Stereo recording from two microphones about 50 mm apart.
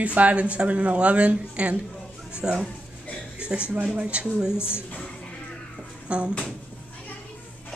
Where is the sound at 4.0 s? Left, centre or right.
Right.